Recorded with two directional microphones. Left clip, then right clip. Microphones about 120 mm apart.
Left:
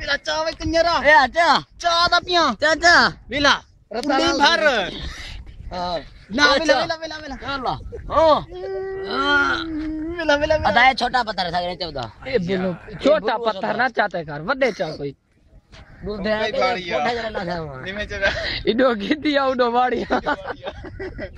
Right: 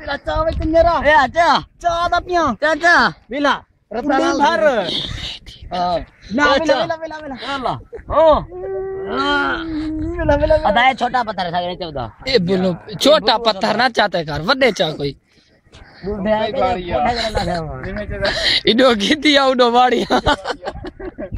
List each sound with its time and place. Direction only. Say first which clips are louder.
0.0 s speech: right 2 dB; 45° left (ahead or behind)
2.7 s speech: right 2 dB; 30° left (ahead or behind)
3.3 s speech: even; 45° left (ahead or behind)
3.9 s speech: right 3 dB; 30° left (ahead or behind)
4.3 s speech: right 1 dB; 40° left (ahead or behind)
6.3 s speech: right 2 dB; 50° left (ahead or behind)
8.6 s speech: right 3 dB; 40° left (ahead or behind)
11.0 s speech: right 2 dB; 30° left (ahead or behind)
12.3 s speech: right 6 dB; 35° right (ahead or behind)
16.0 s speech: right 4 dB; 50° left (ahead or behind)
18.2 s speech: right 6 dB; 20° right (ahead or behind)